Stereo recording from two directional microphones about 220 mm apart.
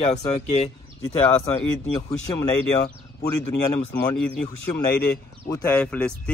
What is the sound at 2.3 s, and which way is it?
Speech, 20° left (ahead or behind).